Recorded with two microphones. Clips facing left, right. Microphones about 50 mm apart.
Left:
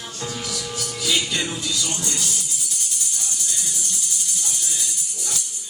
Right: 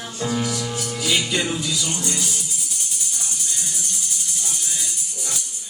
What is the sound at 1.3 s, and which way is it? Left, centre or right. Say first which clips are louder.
Speech: right 3 dB; right.